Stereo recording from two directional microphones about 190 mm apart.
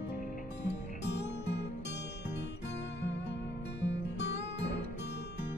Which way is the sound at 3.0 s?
65° left (ahead or behind).